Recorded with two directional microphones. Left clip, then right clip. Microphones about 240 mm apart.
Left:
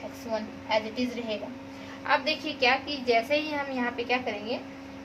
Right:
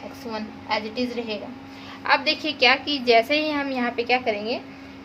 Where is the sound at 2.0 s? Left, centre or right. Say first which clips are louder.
Right 5 dB; right.